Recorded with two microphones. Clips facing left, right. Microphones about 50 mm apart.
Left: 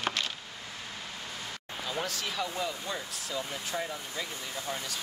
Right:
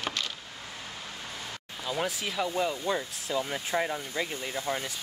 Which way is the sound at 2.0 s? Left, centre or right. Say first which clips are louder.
Right 5 dB; centre.